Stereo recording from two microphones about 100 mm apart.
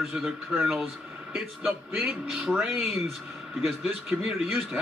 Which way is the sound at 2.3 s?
5° right (ahead or behind).